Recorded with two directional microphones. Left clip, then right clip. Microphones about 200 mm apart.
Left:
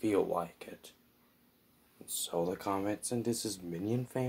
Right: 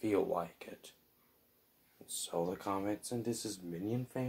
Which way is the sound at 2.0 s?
15° left (ahead or behind).